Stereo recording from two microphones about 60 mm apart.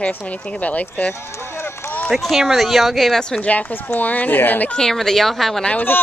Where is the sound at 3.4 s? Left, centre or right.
Left.